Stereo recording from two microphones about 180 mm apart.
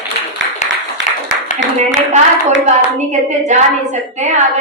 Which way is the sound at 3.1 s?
40° right (ahead or behind).